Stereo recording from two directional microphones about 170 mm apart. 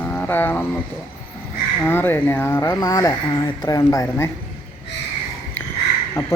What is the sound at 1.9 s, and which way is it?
Speech, 10° left (ahead or behind).